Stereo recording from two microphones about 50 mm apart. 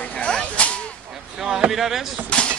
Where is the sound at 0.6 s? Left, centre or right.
Left.